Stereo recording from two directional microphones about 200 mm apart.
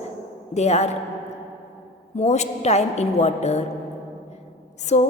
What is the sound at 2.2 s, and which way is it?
A woman's voice, 35° left (ahead or behind).